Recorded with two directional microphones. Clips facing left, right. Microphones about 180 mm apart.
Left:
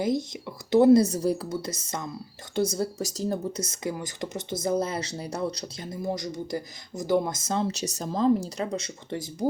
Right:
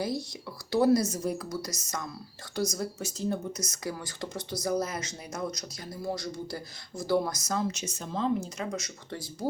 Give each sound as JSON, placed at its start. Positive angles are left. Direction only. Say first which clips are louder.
{"t": 0.0, "sound": "speech", "louder": "left 6 dB", "side_deg": 20}
{"t": 1.0, "sound": "speech", "louder": "left 5 dB", "side_deg": 35}
{"t": 5.9, "sound": "speech", "louder": "left 3 dB", "side_deg": 20}
{"t": 9.0, "sound": "speech", "louder": "left 7 dB", "side_deg": 20}